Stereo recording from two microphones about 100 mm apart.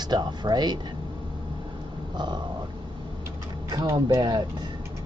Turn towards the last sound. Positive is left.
turn(degrees=-45)  # may be behind; listen again after turning